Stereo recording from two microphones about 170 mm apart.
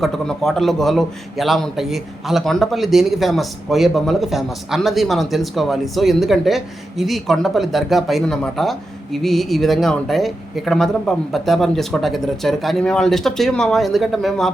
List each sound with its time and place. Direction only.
0.0 s a man's voice: centre (ahead or behind)